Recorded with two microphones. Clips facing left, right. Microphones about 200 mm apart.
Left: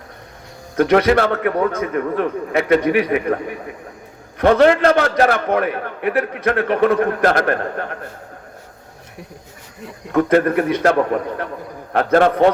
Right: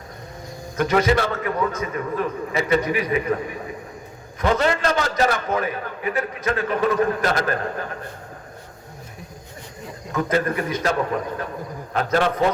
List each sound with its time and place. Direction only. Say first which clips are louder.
0.8 s a man's voice: left 5 dB; 65° left (ahead or behind)
4.4 s a man's voice: left 8 dB; 60° left (ahead or behind)
10.1 s a man's voice: left 7 dB; 60° left (ahead or behind)